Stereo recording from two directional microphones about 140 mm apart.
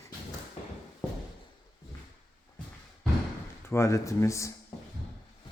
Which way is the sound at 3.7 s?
20° left (ahead or behind).